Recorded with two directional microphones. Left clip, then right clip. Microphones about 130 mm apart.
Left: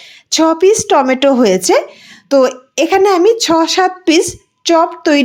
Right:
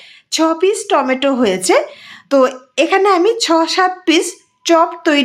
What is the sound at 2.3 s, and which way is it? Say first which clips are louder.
A woman's voice: left 2 dB; 20° left (ahead or behind).